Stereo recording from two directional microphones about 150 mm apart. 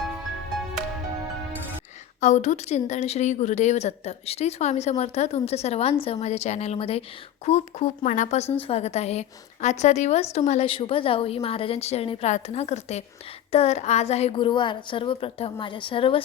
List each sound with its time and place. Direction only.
2.2 s a woman's voice: 50° left (ahead or behind)